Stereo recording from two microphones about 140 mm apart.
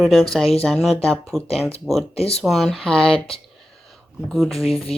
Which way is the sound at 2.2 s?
45° left (ahead or behind).